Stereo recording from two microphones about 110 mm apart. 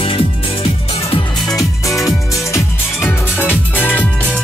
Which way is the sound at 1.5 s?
30° left (ahead or behind).